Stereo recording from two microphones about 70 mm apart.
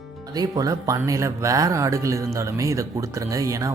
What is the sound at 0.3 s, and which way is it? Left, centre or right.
Speech, right.